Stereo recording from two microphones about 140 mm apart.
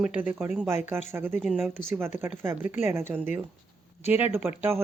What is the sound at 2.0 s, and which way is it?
Speech, 15° right (ahead or behind).